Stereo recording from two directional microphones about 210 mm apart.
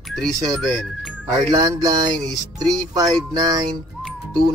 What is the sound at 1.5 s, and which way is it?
Music, 20° right (ahead or behind).